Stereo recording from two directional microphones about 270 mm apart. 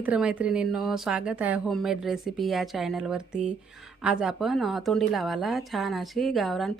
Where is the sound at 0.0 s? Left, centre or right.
Centre.